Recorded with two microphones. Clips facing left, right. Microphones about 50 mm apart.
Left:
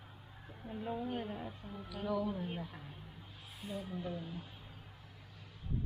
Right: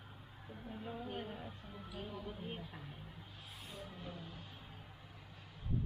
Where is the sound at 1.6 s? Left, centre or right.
Left.